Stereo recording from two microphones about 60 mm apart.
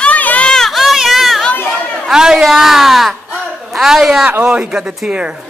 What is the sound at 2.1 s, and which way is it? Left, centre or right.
Speech, centre.